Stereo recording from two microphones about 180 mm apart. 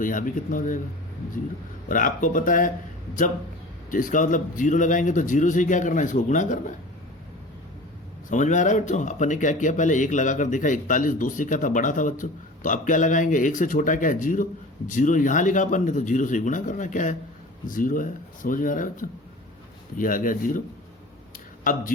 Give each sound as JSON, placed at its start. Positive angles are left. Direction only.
{"t": 0.0, "sound": "a man's voice", "side_deg": 45}
{"t": 1.9, "sound": "a man's voice", "side_deg": 50}
{"t": 3.9, "sound": "a man's voice", "side_deg": 45}
{"t": 8.3, "sound": "a man's voice", "side_deg": 45}
{"t": 21.6, "sound": "speech", "side_deg": 50}